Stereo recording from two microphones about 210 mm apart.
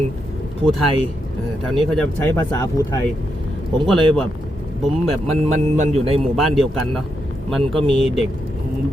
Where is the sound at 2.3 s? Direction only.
15° left (ahead or behind).